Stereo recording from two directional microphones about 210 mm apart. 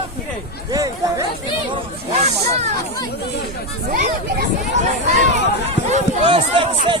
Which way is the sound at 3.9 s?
45° right (ahead or behind).